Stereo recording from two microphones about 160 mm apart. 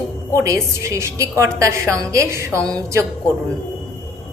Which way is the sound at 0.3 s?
20° right (ahead or behind).